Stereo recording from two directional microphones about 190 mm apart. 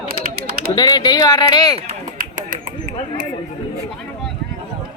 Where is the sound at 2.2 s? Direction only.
45° right (ahead or behind).